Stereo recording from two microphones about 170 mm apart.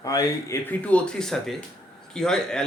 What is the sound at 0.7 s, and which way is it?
Speech, 10° left (ahead or behind).